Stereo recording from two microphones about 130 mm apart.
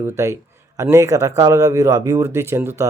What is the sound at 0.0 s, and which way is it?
Speech, 20° right (ahead or behind).